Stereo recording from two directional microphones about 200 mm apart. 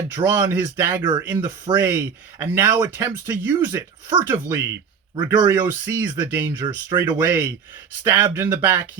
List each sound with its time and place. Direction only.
0.1 s speech: 10° right (ahead or behind)
5.6 s speech: 10° right (ahead or behind)